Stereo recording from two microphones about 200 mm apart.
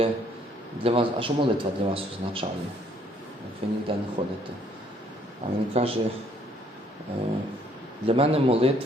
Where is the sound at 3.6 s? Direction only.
30° right (ahead or behind).